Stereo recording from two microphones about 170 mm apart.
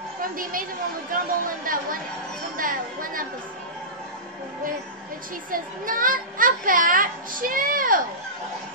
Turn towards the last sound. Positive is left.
turn(degrees=-55)  # may be behind; listen again after turning